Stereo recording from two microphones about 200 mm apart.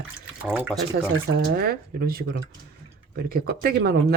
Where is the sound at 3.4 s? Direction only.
50° right (ahead or behind).